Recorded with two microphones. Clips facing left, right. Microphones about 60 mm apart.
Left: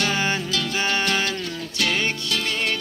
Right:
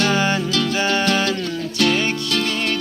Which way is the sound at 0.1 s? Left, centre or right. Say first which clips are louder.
Right 5 dB; left.